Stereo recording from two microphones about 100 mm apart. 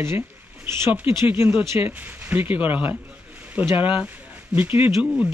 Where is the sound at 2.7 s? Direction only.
15° right (ahead or behind).